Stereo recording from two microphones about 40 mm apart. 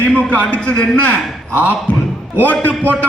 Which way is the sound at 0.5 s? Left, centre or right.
Left.